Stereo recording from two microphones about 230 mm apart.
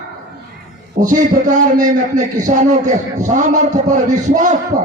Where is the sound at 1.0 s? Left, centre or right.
Right.